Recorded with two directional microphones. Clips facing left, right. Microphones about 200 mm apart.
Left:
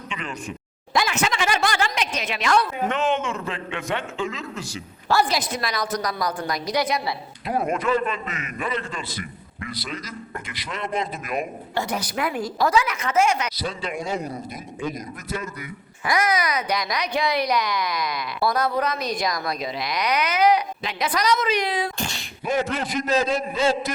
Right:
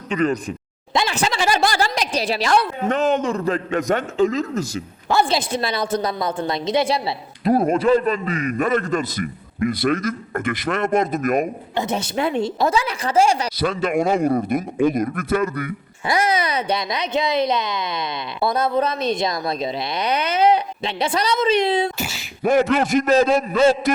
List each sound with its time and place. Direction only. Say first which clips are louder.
0.1 s speech: right 13 dB; 40° right (ahead or behind)
5.0 s a man's voice: right 2 dB; 25° right (ahead or behind); by 11.4 s 45° right (ahead or behind)
11.7 s speech: even; 20° right (ahead or behind)
13.6 s a man's voice: right 9 dB; 55° right (ahead or behind)
16.0 s speech: right 2 dB; 30° right (ahead or behind)
21.9 s sneeze: right 2 dB; 5° right (ahead or behind)
22.4 s a man's voice: right 8 dB; 60° right (ahead or behind)